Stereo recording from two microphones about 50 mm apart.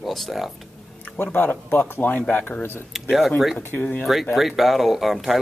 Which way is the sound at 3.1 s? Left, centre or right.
Centre.